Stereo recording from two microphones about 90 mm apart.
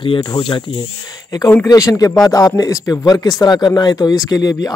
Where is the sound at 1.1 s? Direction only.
45° left (ahead or behind).